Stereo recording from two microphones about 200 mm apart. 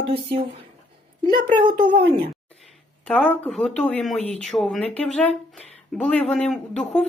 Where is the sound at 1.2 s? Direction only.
20° right (ahead or behind).